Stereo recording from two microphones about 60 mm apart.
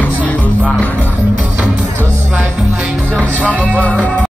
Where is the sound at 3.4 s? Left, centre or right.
Left.